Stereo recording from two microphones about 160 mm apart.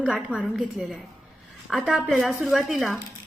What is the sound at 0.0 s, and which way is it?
A woman's voice, 5° right (ahead or behind).